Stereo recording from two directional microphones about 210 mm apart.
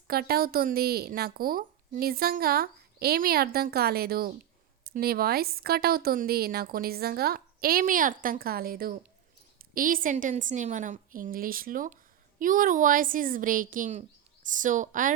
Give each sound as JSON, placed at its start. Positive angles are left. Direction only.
{"t": 0.1, "sound": "a woman's voice", "side_deg": -45}